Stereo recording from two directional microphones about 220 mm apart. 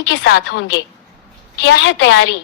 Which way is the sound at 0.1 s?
55° left (ahead or behind).